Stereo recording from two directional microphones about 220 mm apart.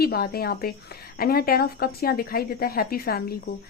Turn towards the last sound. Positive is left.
turn(degrees=45)  # may be behind; listen again after turning